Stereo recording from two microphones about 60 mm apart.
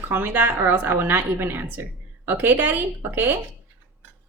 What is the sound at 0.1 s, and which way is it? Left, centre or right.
A woman's voice, right.